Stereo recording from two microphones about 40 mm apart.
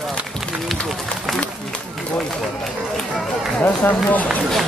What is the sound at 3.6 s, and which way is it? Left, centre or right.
Speech, left.